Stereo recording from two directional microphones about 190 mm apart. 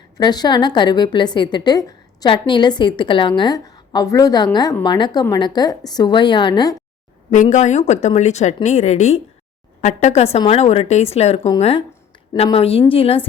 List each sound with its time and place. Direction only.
0.2 s a woman's voice: 20° left (ahead or behind)
7.5 s a woman's voice: 35° left (ahead or behind)